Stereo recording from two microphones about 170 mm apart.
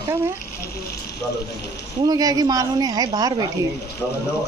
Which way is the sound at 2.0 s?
20° right (ahead or behind).